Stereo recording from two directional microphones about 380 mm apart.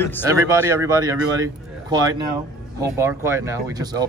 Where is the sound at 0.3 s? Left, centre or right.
Centre.